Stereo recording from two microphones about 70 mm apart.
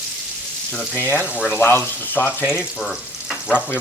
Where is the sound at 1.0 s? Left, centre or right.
Left.